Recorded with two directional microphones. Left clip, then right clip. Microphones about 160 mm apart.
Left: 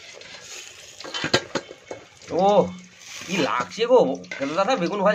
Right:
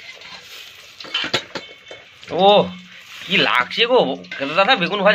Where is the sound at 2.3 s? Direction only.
Centre (ahead or behind).